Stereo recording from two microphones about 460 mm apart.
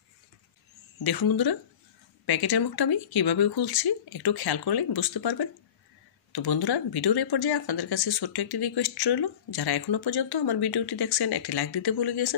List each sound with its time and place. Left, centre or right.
1.0 s speech: left